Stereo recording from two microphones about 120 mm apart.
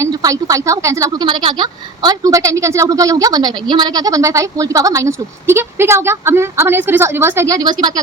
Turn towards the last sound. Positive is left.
turn(degrees=-35)  # may be behind; listen again after turning